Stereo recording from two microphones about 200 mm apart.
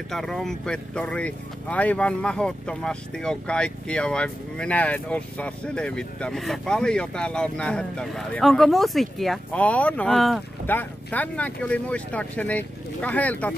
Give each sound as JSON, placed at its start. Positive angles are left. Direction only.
{"t": 0.1, "sound": "speech", "side_deg": 0}